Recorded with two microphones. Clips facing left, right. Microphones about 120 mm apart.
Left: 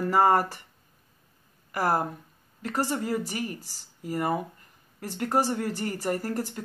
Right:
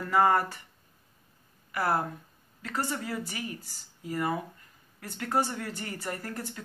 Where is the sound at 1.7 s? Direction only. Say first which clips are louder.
Left 3 dB; 40° left (ahead or behind).